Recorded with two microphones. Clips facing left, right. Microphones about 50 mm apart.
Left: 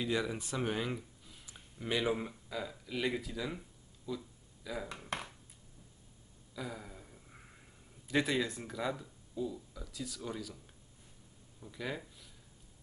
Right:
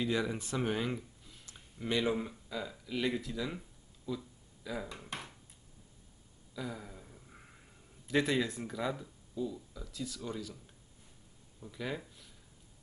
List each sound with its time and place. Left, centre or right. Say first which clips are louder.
0.0 s speech: right 1 dB; centre
6.5 s a sound: right 1 dB; centre
8.1 s speech: right 1 dB; centre
9.3 s speech: right 1 dB; centre
11.6 s speech: right 1 dB; centre